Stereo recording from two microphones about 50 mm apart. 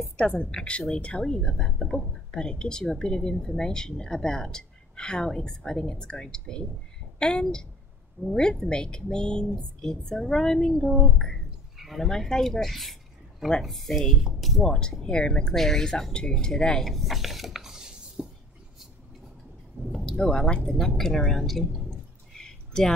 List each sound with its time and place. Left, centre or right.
0.5 s speech: centre
2.3 s a woman's voice: centre
14.6 s speech: centre
15.5 s speech: centre
16.9 s dishes: centre
19.9 s a sound: centre
20.2 s speech: centre
22.3 s a sound: centre